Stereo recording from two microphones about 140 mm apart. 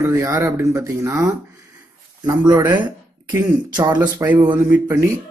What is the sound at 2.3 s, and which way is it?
Speech, 30° right (ahead or behind).